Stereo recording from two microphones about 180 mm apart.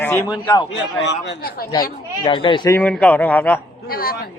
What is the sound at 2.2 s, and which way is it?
Speech, 25° left (ahead or behind).